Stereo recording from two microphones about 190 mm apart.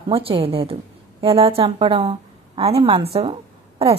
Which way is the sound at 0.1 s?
30° right (ahead or behind).